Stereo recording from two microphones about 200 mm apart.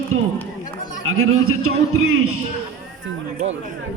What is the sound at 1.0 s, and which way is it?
Speech, 90° right.